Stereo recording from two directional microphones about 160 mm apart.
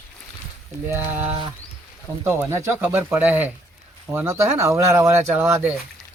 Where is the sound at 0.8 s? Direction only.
10° right (ahead or behind).